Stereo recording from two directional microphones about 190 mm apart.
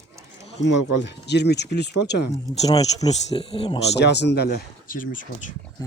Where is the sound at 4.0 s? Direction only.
65° left (ahead or behind); by 5.3 s 45° left (ahead or behind).